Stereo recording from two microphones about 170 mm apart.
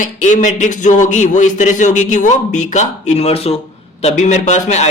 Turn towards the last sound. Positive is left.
turn(degrees=40)  # may be behind; listen again after turning